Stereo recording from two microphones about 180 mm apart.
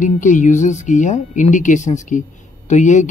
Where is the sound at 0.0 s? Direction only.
45° left (ahead or behind).